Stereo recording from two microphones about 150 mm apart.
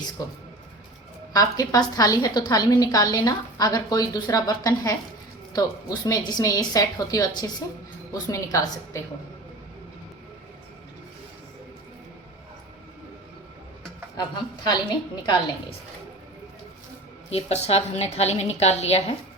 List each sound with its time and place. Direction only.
1.3 s a woman's voice: 25° left (ahead or behind)
14.2 s a woman's voice: 30° left (ahead or behind)
17.3 s a woman's voice: 45° left (ahead or behind)